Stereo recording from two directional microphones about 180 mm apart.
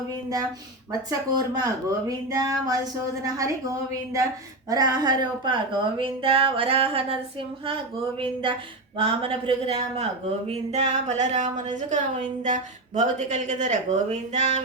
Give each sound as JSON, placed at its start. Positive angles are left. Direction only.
{"t": 0.9, "sound": "speech", "side_deg": -20}
{"t": 9.0, "sound": "speech", "side_deg": -30}
{"t": 12.4, "sound": "a sound", "side_deg": -45}
{"t": 13.0, "sound": "speech", "side_deg": -40}